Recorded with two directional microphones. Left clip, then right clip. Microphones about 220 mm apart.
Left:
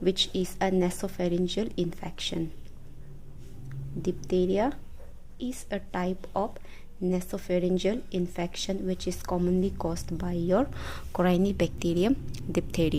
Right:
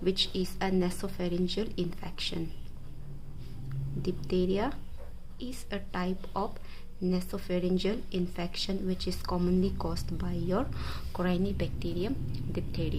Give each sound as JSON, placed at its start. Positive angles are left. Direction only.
{"t": 0.0, "sound": "speech", "side_deg": 25}
{"t": 4.0, "sound": "a woman's voice", "side_deg": 25}